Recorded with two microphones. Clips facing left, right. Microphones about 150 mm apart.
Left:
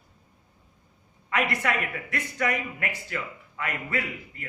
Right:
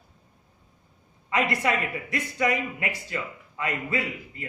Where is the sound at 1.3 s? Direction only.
20° right (ahead or behind).